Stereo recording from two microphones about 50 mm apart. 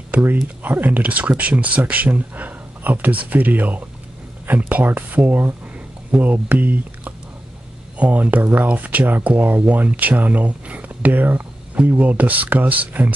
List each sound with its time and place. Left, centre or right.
0.7 s speech: right